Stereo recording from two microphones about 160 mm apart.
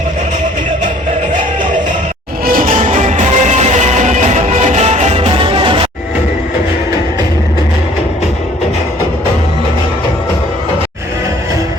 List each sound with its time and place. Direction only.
2.5 s music: 60° right (ahead or behind)
2.8 s music: 45° right (ahead or behind)